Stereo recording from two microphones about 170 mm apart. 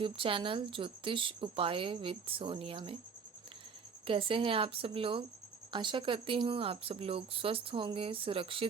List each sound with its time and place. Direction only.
0.0 s speech: 30° right (ahead or behind)
4.0 s speech: 30° right (ahead or behind)